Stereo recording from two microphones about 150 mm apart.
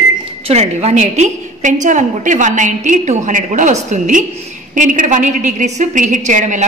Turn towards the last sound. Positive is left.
turn(degrees=-55)  # may be behind; listen again after turning